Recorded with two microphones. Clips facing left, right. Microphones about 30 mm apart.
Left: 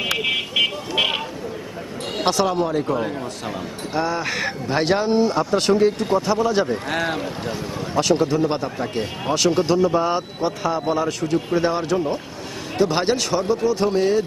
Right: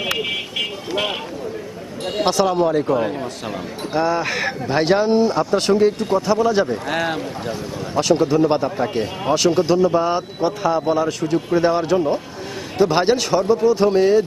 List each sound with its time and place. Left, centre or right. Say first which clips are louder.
2.2 s a man's voice: right 3 dB; centre